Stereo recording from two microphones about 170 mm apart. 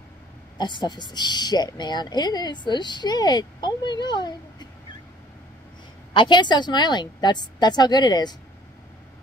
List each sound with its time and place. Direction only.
0.6 s a woman's voice: 25° left (ahead or behind)
6.1 s a woman's voice: 25° left (ahead or behind)